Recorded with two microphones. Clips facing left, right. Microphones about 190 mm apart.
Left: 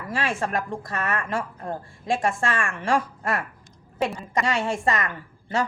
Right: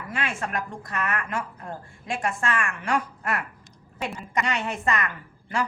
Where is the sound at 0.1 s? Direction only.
30° left (ahead or behind).